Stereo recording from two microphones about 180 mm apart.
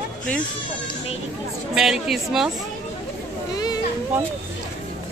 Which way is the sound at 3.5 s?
20° left (ahead or behind).